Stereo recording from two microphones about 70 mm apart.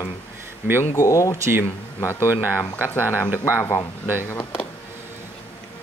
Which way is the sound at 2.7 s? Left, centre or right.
Left.